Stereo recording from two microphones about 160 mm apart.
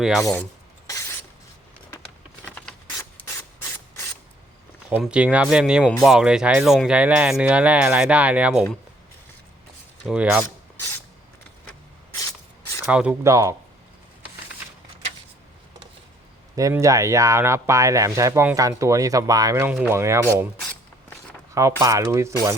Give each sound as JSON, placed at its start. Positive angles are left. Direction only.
{"t": 0.0, "sound": "speech", "side_deg": 0}
{"t": 0.9, "sound": "a sound", "side_deg": 20}
{"t": 2.4, "sound": "rub", "side_deg": 10}
{"t": 4.9, "sound": "speech", "side_deg": -10}
{"t": 10.1, "sound": "speech", "side_deg": -5}
{"t": 10.4, "sound": "filing", "side_deg": 20}
{"t": 12.8, "sound": "speech", "side_deg": -5}
{"t": 13.2, "sound": "speech", "side_deg": -20}
{"t": 16.6, "sound": "speech", "side_deg": -20}
{"t": 21.5, "sound": "speech", "side_deg": -20}